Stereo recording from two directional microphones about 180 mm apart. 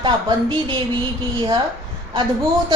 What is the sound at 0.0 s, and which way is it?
Speech, 25° right (ahead or behind).